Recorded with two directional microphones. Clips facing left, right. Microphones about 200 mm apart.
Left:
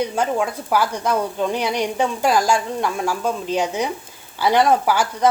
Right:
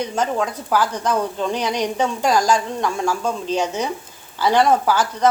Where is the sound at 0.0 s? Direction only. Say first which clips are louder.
Left 1 dB; 10° left (ahead or behind).